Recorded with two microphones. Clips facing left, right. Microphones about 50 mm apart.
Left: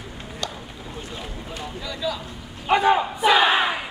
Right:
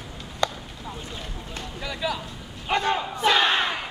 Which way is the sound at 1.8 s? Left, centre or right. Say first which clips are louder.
Even; centre.